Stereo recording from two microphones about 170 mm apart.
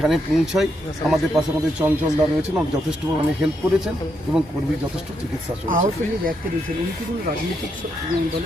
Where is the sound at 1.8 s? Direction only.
15° right (ahead or behind).